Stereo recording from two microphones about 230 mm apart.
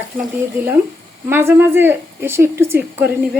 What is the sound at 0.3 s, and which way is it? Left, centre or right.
A woman's voice, centre.